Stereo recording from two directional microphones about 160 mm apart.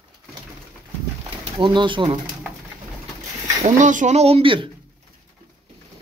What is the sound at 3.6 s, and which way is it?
Speech, 50° right (ahead or behind).